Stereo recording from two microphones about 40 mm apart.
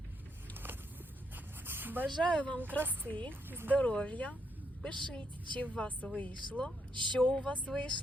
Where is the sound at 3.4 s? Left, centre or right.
Right.